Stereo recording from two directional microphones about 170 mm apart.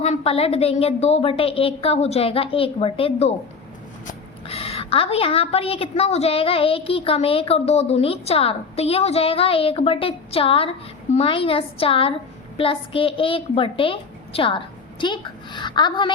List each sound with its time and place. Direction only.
0.0 s a woman's voice: 35° left (ahead or behind)
4.4 s a woman's voice: 35° left (ahead or behind)